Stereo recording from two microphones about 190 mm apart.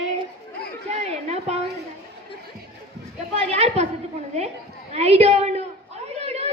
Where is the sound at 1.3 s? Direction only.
35° right (ahead or behind).